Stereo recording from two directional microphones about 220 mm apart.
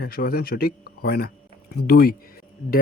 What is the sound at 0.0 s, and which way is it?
Speech, 40° left (ahead or behind).